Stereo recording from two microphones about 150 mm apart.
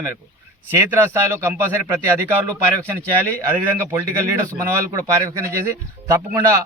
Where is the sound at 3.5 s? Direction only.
20° right (ahead or behind).